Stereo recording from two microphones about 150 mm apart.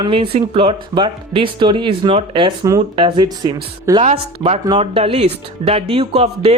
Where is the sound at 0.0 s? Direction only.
35° right (ahead or behind).